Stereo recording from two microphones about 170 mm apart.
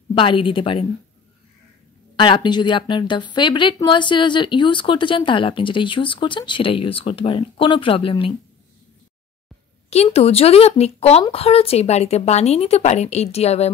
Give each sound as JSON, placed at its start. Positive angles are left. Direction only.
{"t": 0.1, "sound": "a woman's voice", "side_deg": 30}
{"t": 2.1, "sound": "speech", "side_deg": 30}
{"t": 10.1, "sound": "a woman's voice", "side_deg": 35}